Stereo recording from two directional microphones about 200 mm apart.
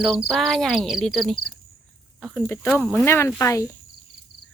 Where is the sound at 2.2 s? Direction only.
Centre (ahead or behind).